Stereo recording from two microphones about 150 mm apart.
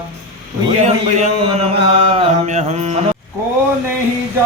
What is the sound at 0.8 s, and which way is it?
Mantra, 50° right (ahead or behind).